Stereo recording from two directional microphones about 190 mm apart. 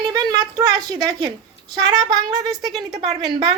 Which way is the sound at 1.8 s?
20° right (ahead or behind).